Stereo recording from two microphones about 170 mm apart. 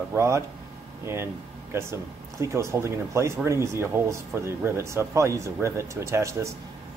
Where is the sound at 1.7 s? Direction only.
15° right (ahead or behind).